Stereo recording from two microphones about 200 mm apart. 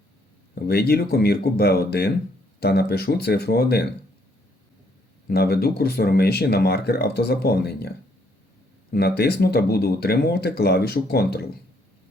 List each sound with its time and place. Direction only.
0.5 s speech: 50° left (ahead or behind)
5.3 s speech: 50° left (ahead or behind)